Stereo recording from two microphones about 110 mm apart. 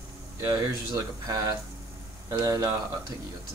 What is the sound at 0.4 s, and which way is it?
Speech, 30° right (ahead or behind).